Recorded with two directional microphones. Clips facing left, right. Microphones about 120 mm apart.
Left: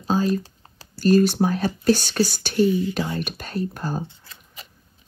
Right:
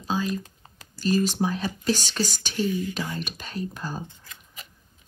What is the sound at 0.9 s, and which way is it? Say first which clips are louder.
Speech: left 7 dB; 50° left (ahead or behind).